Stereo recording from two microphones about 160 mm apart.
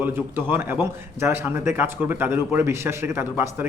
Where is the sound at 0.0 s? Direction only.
15° right (ahead or behind).